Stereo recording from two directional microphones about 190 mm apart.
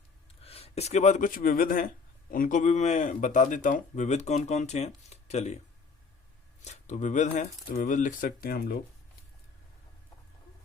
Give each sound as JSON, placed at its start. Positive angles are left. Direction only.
{"t": 0.4, "sound": "speech", "side_deg": 30}
{"t": 6.7, "sound": "speech", "side_deg": 40}